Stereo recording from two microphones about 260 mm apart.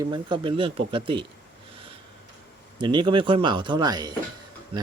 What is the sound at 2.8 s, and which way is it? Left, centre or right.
Speech, centre.